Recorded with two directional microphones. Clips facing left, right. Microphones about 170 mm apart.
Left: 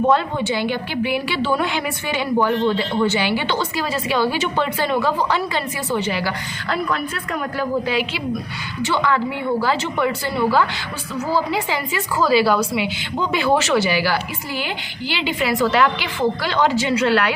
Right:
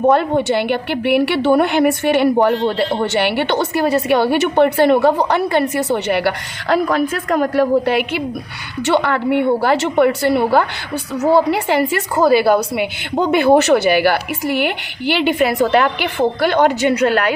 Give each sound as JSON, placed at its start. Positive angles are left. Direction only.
{"t": 0.1, "sound": "a woman's voice", "side_deg": -55}
{"t": 6.8, "sound": "speech", "side_deg": -50}
{"t": 7.3, "sound": "a woman's voice", "side_deg": -70}